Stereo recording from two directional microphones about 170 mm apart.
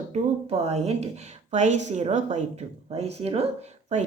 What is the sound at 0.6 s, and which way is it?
A woman's voice, 40° right (ahead or behind).